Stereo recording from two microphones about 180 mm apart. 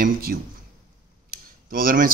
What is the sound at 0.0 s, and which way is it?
Speech, 55° right (ahead or behind).